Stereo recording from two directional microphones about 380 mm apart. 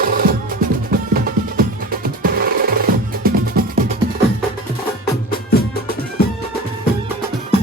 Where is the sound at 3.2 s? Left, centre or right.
Right.